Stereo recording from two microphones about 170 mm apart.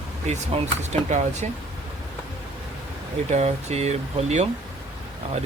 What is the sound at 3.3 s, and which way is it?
Speech, 40° right (ahead or behind).